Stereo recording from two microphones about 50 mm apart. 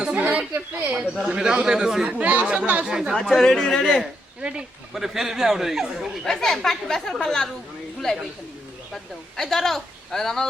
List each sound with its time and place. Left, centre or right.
0.0 s a sound: right
0.5 s speech: right
1.3 s a man's voice: centre
2.0 s a man's voice: right; by 3.2 s centre
3.2 s speech: centre
4.4 s speech: centre
4.9 s a man's voice: centre
6.2 s speech: centre
9.4 s speech: centre